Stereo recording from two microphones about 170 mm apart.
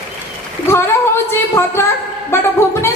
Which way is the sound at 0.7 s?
15° left (ahead or behind).